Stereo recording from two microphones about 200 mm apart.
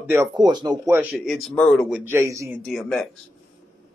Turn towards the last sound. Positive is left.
turn(degrees=0)  # may be behind; listen again after turning